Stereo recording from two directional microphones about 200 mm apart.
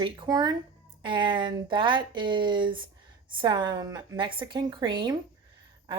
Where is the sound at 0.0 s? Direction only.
20° right (ahead or behind).